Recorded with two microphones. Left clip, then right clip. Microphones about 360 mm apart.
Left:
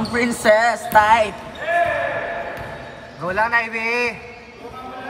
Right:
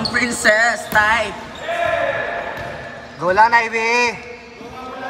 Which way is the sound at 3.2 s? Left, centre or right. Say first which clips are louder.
Right 6 dB; centre.